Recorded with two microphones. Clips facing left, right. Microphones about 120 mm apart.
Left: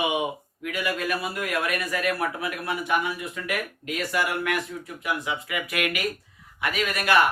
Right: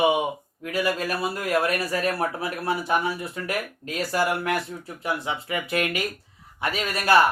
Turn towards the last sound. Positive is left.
turn(degrees=-30)  # may be behind; listen again after turning